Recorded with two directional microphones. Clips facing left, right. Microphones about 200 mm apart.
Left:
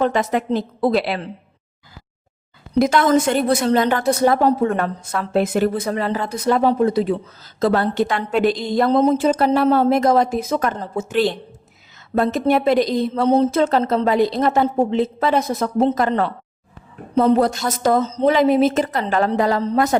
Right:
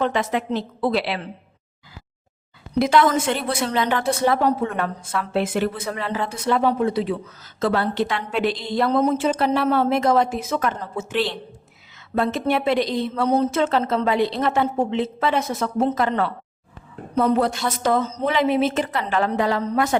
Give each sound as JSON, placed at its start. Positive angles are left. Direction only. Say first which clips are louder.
{"t": 0.0, "sound": "a woman's voice", "louder": "left 3 dB", "side_deg": 40}
{"t": 2.7, "sound": "a woman's voice", "louder": "left 3 dB", "side_deg": 45}
{"t": 13.2, "sound": "a woman's voice", "louder": "left 4 dB", "side_deg": 30}